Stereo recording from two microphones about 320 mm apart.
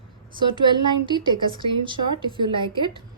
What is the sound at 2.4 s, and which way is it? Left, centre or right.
Speech, centre.